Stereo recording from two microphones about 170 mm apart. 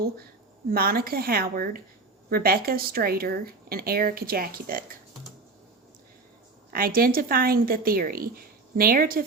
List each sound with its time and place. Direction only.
0.7 s speech: 60° right (ahead or behind)
6.7 s speech: 60° right (ahead or behind)